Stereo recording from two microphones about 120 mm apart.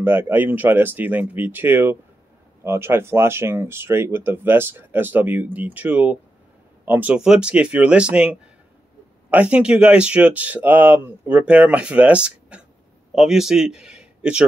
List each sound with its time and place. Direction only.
0.0 s speech: 15° right (ahead or behind)